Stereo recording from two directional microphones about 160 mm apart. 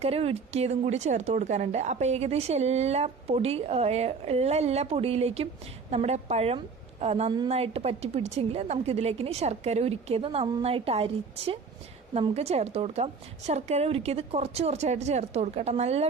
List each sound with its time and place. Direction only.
0.0 s a woman's voice: 40° right (ahead or behind)